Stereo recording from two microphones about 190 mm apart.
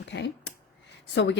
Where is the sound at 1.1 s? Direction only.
65° left (ahead or behind).